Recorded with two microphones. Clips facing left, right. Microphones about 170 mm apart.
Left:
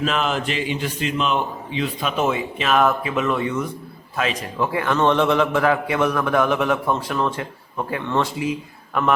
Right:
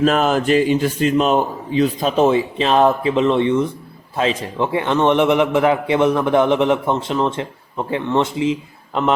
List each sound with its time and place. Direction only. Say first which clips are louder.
0.0 s a man's voice: right 7 dB; 45° right (ahead or behind); by 9.1 s 25° right (ahead or behind)